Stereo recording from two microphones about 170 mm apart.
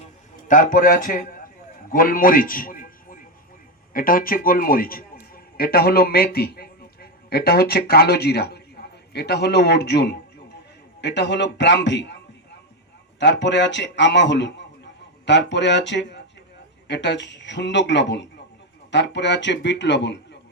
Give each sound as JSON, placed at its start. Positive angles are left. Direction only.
{"t": 0.4, "sound": "a man's voice", "side_deg": 50}
{"t": 11.0, "sound": "a man's voice", "side_deg": 90}